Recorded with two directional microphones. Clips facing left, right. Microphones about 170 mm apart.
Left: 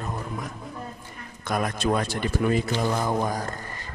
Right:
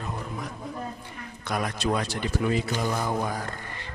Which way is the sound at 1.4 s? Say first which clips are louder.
Left 3 dB; 50° left (ahead or behind).